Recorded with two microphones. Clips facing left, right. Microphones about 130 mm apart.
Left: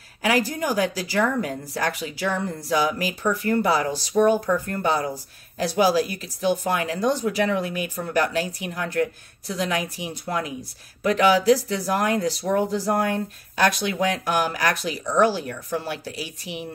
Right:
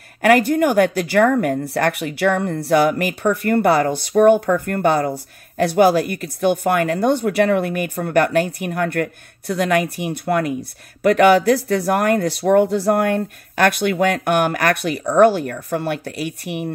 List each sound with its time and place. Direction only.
0.2 s speech: 60° right (ahead or behind)